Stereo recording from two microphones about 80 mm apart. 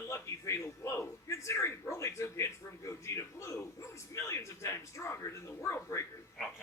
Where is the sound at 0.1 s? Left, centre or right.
Left.